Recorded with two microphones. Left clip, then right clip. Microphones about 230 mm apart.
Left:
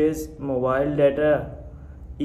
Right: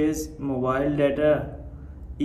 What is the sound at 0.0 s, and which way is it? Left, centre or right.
Speech, centre.